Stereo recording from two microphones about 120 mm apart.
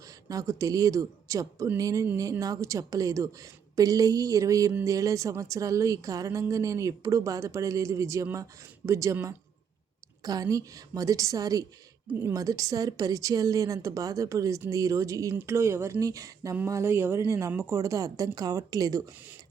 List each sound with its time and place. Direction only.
0.3 s a woman's voice: 30° right (ahead or behind)
10.2 s a woman's voice: 30° right (ahead or behind)